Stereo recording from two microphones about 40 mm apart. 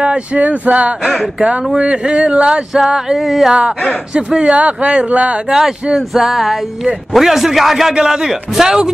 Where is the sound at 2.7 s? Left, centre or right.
Centre.